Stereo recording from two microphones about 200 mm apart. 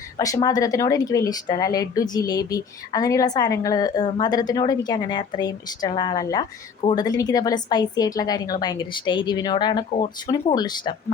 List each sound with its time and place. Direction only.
0.4 s a woman's voice: 15° left (ahead or behind)